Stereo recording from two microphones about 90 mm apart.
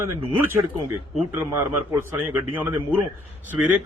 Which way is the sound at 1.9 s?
25° right (ahead or behind).